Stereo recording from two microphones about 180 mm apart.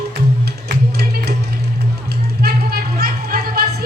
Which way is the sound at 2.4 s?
60° right (ahead or behind).